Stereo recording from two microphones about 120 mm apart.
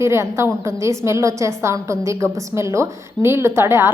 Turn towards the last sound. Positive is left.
turn(degrees=-20)  # may be behind; listen again after turning